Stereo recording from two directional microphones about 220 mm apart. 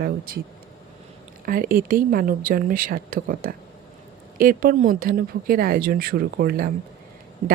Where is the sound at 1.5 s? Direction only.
40° right (ahead or behind).